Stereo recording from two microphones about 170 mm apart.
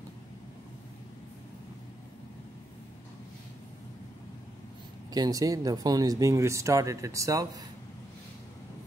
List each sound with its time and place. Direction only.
5.1 s speech: 20° right (ahead or behind)